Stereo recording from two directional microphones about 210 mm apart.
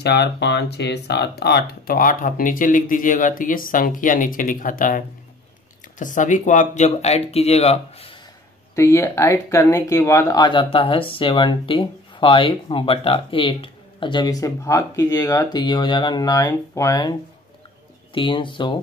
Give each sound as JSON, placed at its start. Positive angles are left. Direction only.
{"t": 0.0, "sound": "speech", "side_deg": 55}
{"t": 8.7, "sound": "speech", "side_deg": 10}
{"t": 18.1, "sound": "speech", "side_deg": 25}